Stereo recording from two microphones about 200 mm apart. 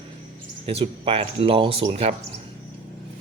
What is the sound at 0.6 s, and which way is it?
Speech, 30° right (ahead or behind).